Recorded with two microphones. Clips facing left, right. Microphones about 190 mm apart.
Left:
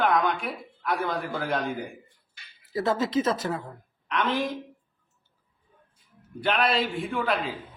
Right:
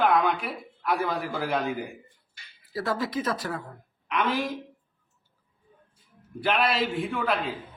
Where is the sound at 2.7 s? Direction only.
20° left (ahead or behind).